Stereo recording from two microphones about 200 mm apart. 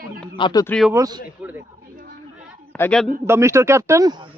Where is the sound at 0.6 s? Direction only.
5° left (ahead or behind).